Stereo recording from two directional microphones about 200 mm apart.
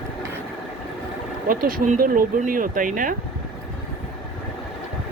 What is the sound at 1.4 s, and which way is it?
Speech, 45° right (ahead or behind).